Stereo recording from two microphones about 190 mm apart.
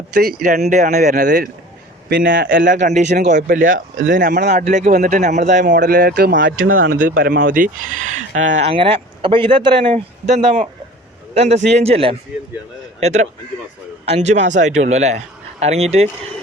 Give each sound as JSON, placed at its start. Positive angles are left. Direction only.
{"t": 0.1, "sound": "speech", "side_deg": -55}
{"t": 0.7, "sound": "a man's voice", "side_deg": -40}
{"t": 2.3, "sound": "speech", "side_deg": -70}
{"t": 2.8, "sound": "a man's voice", "side_deg": -40}